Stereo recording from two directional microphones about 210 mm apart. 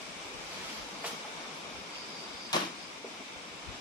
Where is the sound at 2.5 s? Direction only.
20° left (ahead or behind).